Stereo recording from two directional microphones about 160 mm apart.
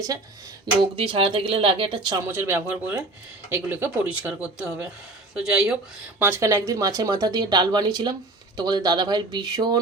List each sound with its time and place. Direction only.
0.8 s speech: 35° right (ahead or behind)
2.2 s speech: 15° right (ahead or behind)
6.1 s speech: 15° right (ahead or behind)